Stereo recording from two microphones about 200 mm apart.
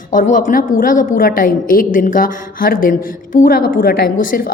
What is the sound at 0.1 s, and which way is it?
A woman's voice, 40° left (ahead or behind).